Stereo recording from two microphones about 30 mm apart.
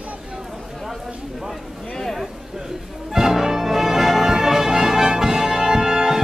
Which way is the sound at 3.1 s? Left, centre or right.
Centre.